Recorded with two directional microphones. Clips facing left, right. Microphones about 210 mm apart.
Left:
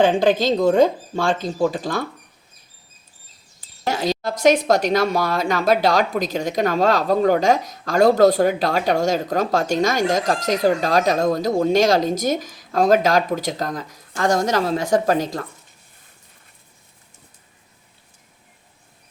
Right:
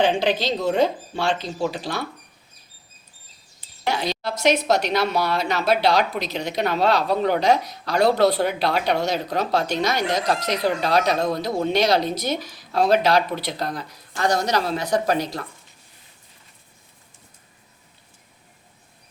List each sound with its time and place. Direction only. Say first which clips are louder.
0.0 s a woman's voice: left 4 dB; 45° left (ahead or behind)
3.8 s a woman's voice: left 3 dB; 45° left (ahead or behind)